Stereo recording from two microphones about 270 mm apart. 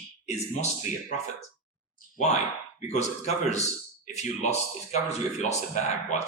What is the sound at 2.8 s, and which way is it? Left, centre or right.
Speech, left.